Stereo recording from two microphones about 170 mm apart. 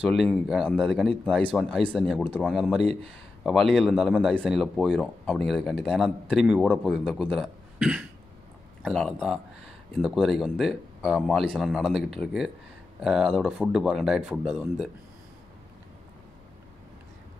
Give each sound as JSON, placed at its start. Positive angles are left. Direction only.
{"t": 0.1, "sound": "speech", "side_deg": 0}
{"t": 2.8, "sound": "speech", "side_deg": -35}
{"t": 3.4, "sound": "speech", "side_deg": 0}